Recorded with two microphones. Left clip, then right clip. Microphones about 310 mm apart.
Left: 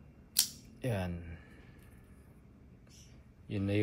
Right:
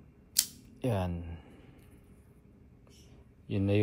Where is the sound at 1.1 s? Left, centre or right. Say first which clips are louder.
Right 3 dB; right.